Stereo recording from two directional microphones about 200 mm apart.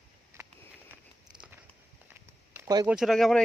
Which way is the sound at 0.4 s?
15° right (ahead or behind).